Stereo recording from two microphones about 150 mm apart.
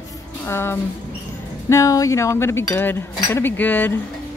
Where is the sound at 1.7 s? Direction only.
20° left (ahead or behind).